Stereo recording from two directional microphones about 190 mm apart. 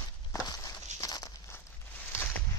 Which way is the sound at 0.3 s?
20° left (ahead or behind).